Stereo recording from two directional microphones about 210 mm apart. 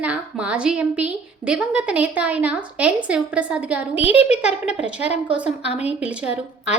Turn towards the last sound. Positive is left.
turn(degrees=-5)  # may be behind; listen again after turning